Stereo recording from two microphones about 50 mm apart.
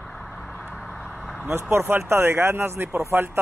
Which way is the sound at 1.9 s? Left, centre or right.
Right.